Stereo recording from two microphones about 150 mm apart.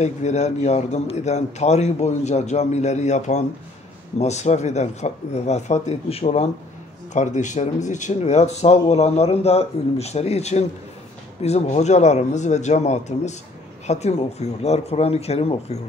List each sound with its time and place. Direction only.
0.0 s a man's voice: 50° left (ahead or behind)
7.2 s a man's voice: 55° left (ahead or behind)